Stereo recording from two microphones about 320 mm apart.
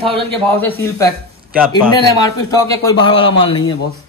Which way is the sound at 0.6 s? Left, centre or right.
Centre.